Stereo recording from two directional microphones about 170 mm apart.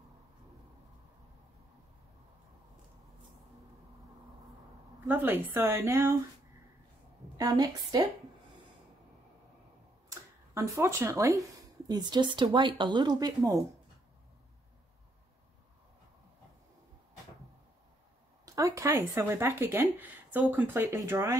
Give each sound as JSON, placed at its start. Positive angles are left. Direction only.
{"t": 5.0, "sound": "speech", "side_deg": -10}
{"t": 7.3, "sound": "speech", "side_deg": -20}
{"t": 10.0, "sound": "speech", "side_deg": -15}
{"t": 18.4, "sound": "speech", "side_deg": -20}